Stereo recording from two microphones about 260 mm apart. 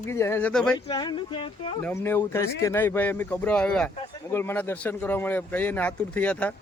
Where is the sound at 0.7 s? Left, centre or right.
Centre.